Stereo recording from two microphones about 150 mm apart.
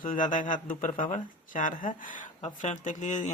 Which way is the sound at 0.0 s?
60° left (ahead or behind).